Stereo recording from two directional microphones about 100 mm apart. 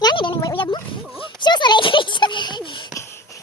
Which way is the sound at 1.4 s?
50° left (ahead or behind).